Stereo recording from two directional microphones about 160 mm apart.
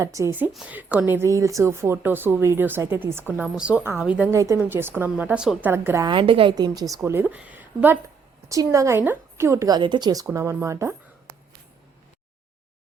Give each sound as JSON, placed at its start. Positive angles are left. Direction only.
{"t": 0.0, "sound": "a woman's voice", "side_deg": -20}
{"t": 4.3, "sound": "a woman's voice", "side_deg": -20}
{"t": 6.1, "sound": "a woman's voice", "side_deg": -35}